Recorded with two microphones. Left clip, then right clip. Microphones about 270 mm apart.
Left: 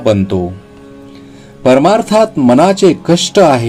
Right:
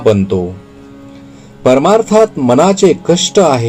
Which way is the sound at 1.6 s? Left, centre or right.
Left.